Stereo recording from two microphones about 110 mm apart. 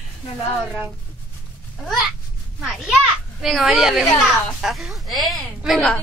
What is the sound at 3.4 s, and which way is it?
A woman's voice, centre (ahead or behind).